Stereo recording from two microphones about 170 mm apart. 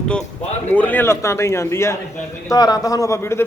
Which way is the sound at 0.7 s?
10° left (ahead or behind).